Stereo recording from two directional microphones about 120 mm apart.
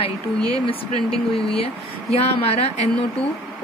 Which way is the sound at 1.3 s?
55° left (ahead or behind).